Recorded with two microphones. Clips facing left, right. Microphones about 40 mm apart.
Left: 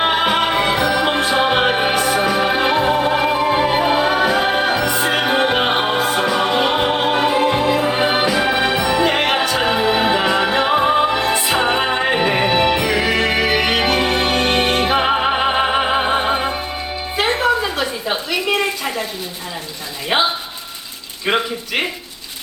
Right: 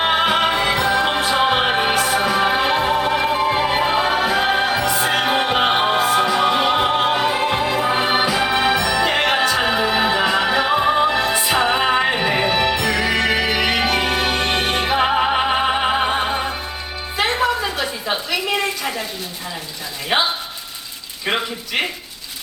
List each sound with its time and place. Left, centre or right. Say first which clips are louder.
0.2 s music: left 1 dB; centre
9.3 s music: even; centre
12.3 s music: left 2 dB; centre
15.8 s opera: left 2 dB; centre
17.2 s a sound: left 2 dB; centre